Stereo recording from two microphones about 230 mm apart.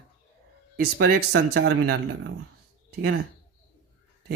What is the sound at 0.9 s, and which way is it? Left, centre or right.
Speech, right.